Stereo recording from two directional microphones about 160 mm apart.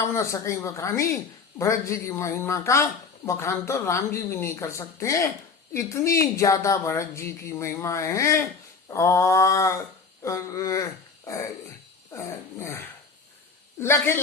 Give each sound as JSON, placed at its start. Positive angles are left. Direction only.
{"t": 0.1, "sound": "speech", "side_deg": 15}
{"t": 12.1, "sound": "speech", "side_deg": 15}